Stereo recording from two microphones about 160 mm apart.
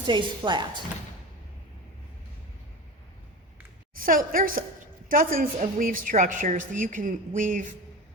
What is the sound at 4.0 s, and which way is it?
A woman's voice, 60° right (ahead or behind).